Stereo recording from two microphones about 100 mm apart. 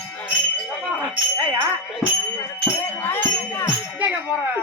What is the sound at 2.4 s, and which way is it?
Music, 20° left (ahead or behind).